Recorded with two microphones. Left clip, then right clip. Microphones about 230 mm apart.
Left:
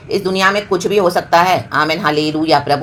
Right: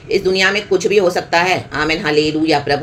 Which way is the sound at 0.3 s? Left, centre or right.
Centre.